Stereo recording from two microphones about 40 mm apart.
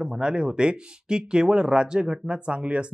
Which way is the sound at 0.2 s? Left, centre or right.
Right.